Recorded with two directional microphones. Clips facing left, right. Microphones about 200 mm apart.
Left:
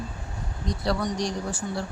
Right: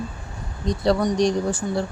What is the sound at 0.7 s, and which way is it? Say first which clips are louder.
Speech: right 7 dB; 20° right (ahead or behind).